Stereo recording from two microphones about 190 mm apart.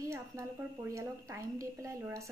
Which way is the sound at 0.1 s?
15° right (ahead or behind).